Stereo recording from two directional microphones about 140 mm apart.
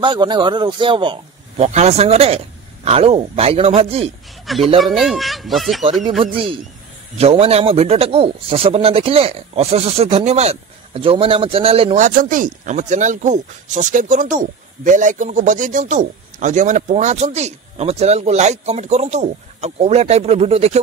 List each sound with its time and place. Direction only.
0.0 s speech: 35° right (ahead or behind)
1.6 s a man's voice: 50° right (ahead or behind)
4.7 s speech: centre (ahead or behind)
6.3 s a man's voice: 40° right (ahead or behind)
12.0 s speech: 70° right (ahead or behind); by 20.8 s 50° right (ahead or behind)